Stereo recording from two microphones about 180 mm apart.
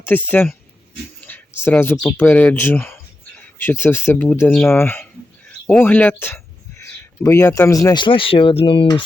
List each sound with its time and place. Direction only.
0.0 s speech: 10° left (ahead or behind)
1.6 s speech: 10° left (ahead or behind); by 9.0 s 30° left (ahead or behind)